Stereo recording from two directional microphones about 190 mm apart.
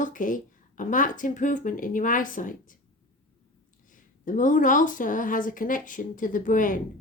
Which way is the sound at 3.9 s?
45° left (ahead or behind).